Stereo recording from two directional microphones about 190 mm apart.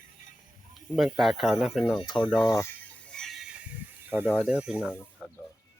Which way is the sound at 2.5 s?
15° left (ahead or behind).